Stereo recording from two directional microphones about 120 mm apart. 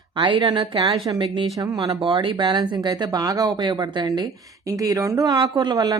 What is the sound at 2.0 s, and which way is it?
Speech, 45° right (ahead or behind).